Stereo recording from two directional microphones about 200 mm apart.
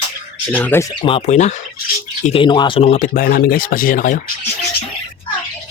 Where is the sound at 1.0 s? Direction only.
30° left (ahead or behind).